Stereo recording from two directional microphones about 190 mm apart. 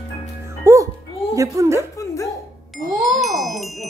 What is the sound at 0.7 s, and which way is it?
Music, 15° right (ahead or behind).